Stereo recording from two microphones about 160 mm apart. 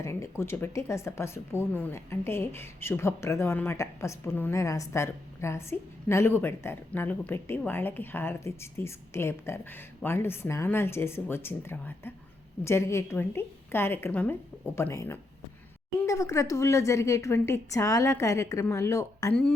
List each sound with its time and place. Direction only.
0.0 s speech: 15° left (ahead or behind)